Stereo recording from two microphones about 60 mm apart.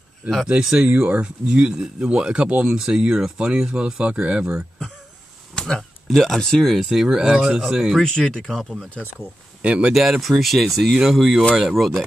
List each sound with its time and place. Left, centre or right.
0.5 s speech: centre
0.8 s speech: right
5.6 s speech: centre
6.8 s speech: centre
8.0 s speech: centre
9.6 s speech: right
9.9 s speech: centre